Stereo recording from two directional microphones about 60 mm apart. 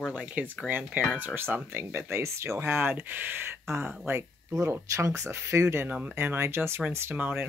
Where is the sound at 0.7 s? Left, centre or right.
Right.